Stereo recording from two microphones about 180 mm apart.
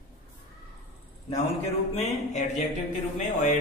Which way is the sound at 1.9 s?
40° left (ahead or behind).